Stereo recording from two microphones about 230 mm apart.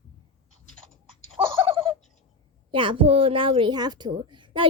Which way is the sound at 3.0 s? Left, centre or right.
Right.